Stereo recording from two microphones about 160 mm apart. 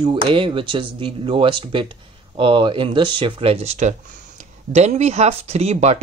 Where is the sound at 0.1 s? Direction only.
35° right (ahead or behind).